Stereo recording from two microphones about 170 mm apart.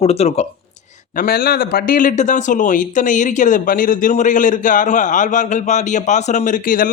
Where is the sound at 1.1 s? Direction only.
60° left (ahead or behind).